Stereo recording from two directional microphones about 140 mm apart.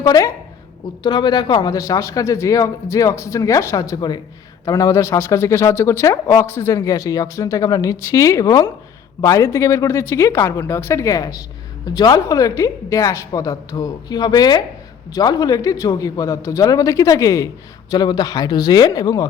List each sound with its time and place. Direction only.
0.0 s a woman's voice: 25° left (ahead or behind)